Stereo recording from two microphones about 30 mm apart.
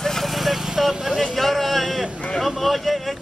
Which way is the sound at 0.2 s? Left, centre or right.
Centre.